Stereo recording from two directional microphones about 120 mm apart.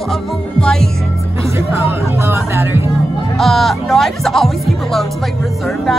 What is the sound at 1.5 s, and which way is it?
Speech, 20° right (ahead or behind).